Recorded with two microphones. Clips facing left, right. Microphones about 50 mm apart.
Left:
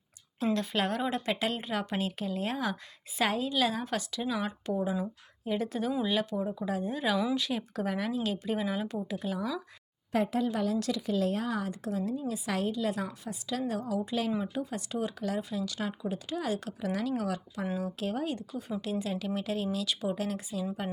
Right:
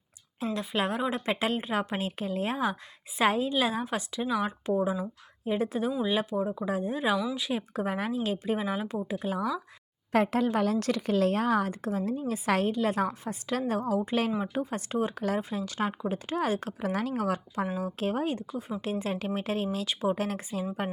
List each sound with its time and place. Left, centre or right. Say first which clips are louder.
0.5 s a woman's voice: right 2 dB; centre; by 9.6 s right
10.1 s a woman's voice: right 4 dB; right
15.4 s speech: right 3 dB; right
20.1 s speech: right 2 dB; right